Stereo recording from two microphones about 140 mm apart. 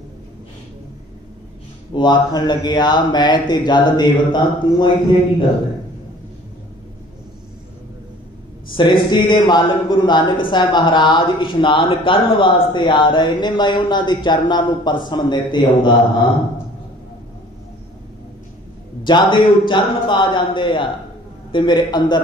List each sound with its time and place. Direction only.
2.0 s a man's voice: 35° left (ahead or behind)
8.7 s a man's voice: 35° left (ahead or behind)
19.0 s a man's voice: 35° left (ahead or behind)